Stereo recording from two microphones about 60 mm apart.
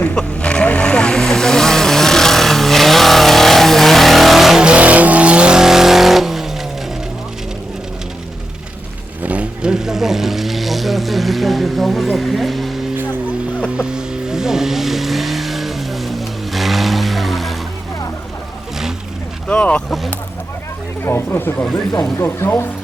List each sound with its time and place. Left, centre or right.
0.0 s vehicle: centre
4.6 s vehicle: right; by 6.7 s centre
9.2 s vehicle: right; by 12.7 s centre
13.7 s vehicle: centre
19.5 s vehicle: centre
21.0 s a sound: left
22.2 s speech: left